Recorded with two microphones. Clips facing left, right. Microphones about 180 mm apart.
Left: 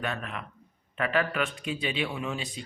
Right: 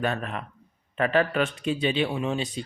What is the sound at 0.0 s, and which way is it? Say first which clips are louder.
Speech: right 5 dB; 35° right (ahead or behind).